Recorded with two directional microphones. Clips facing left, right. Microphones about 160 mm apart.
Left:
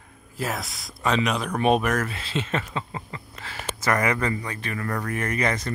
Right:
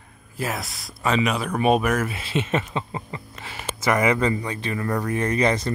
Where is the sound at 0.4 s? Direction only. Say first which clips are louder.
Right 1 dB; centre (ahead or behind).